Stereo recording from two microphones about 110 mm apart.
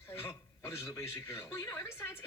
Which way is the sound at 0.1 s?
20° left (ahead or behind).